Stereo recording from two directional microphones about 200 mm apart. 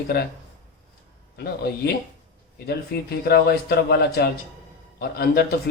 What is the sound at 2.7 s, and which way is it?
Speech, 50° left (ahead or behind).